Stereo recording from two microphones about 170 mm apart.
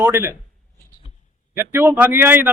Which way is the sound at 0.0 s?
15° right (ahead or behind).